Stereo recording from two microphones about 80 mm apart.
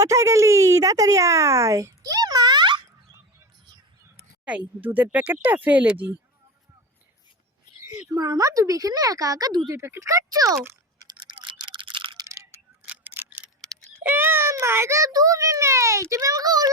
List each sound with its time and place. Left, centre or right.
0.0 s speech: right
4.4 s speech: centre
8.1 s speech: right
9.6 s a child's voice: right
11.0 s a sound: right
12.9 s camera: right
13.6 s wail: centre
14.0 s a sound: right
14.5 s a child's voice: right